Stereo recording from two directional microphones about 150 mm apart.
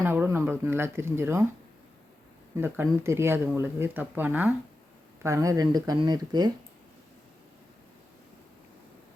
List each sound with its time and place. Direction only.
0.0 s speech: 15° right (ahead or behind)
2.6 s speech: 15° right (ahead or behind)